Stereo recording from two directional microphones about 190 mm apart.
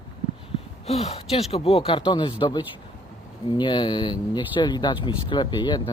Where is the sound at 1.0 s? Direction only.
35° left (ahead or behind).